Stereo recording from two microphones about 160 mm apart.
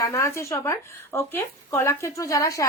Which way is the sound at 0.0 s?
20° left (ahead or behind).